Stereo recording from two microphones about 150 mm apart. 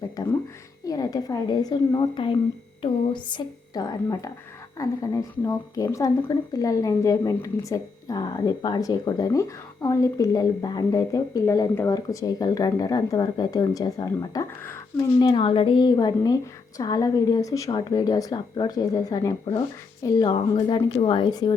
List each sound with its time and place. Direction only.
0.9 s a woman's voice: 25° left (ahead or behind)
11.9 s a woman's voice: 25° left (ahead or behind)
15.2 s a woman's voice: 30° left (ahead or behind)